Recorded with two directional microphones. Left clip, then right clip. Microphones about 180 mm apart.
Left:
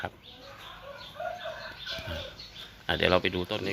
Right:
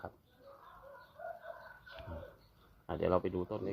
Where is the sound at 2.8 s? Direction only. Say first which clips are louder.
Left 8 dB; centre (ahead or behind).